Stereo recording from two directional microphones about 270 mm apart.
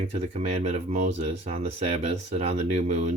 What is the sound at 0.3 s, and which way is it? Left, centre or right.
Speech, right.